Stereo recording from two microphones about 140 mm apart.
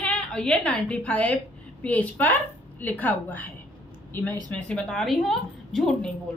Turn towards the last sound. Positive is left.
turn(degrees=5)  # may be behind; listen again after turning